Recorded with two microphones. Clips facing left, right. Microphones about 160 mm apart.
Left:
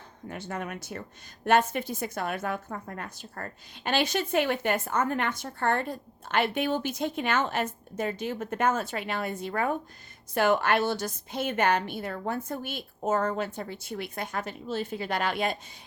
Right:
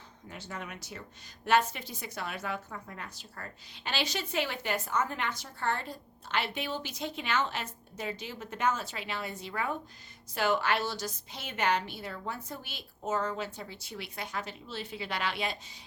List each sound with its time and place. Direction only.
0.3 s a woman's voice: 55° left (ahead or behind)